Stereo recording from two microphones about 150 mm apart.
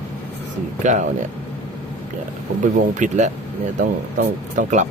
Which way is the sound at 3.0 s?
50° right (ahead or behind).